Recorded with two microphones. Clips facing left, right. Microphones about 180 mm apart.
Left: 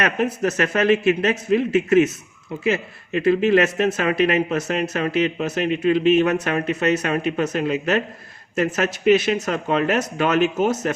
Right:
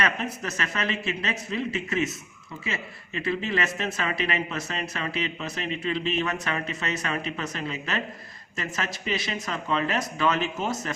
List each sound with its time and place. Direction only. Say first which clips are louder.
0.0 s speech: left 8 dB; 60° left (ahead or behind)